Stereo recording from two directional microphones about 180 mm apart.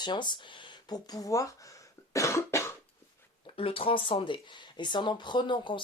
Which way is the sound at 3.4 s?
30° left (ahead or behind).